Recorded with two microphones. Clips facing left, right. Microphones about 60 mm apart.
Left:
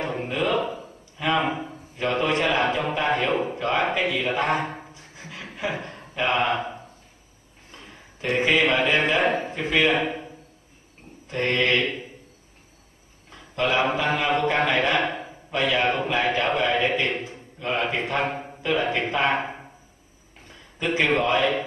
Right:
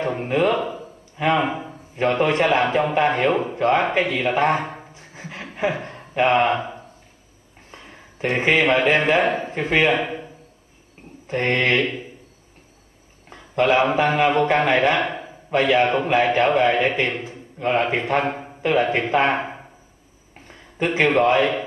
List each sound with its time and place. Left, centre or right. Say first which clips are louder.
0.2 s a man's voice: right 4 dB; right
5.1 s a sound: right 4 dB; right
8.4 s a man's voice: right 3 dB; right
11.2 s a man's voice: right 3 dB; right
13.3 s a man's voice: right 6 dB; right
20.8 s a man's voice: right 4 dB; right